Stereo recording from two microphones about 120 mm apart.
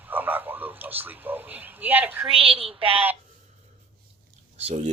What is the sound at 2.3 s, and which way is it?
Speech, 50° right (ahead or behind).